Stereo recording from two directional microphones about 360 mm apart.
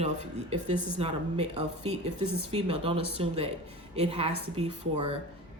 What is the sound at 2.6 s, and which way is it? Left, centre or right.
Speech, centre.